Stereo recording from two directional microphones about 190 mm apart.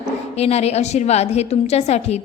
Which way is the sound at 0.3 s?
35° left (ahead or behind).